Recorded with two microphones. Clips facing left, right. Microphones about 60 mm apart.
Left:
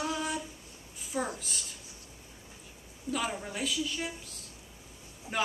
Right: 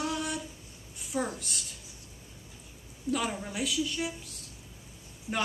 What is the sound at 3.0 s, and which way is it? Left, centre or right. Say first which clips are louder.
A woman's voice: right 2 dB; centre.